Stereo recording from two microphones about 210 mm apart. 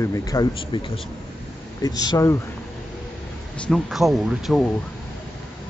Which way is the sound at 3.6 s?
Centre (ahead or behind).